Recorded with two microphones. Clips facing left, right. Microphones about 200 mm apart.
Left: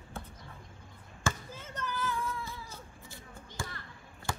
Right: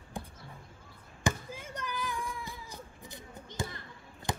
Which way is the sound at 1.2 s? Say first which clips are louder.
Right 3 dB; 10° right (ahead or behind).